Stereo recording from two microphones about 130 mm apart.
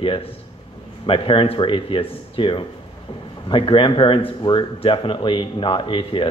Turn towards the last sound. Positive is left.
turn(degrees=40)  # may be behind; listen again after turning